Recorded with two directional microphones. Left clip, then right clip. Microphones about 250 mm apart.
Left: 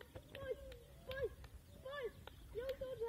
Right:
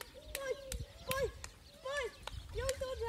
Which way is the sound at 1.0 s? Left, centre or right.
Centre.